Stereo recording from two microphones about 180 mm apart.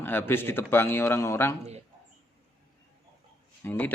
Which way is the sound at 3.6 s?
15° left (ahead or behind).